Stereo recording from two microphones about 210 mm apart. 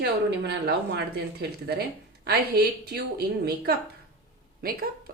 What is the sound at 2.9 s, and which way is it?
A woman's voice, 50° right (ahead or behind).